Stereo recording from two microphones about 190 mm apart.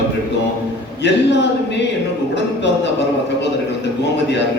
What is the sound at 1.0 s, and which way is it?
A man's voice, 65° left (ahead or behind).